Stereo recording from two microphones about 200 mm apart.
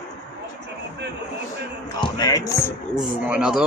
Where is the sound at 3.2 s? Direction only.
5° right (ahead or behind).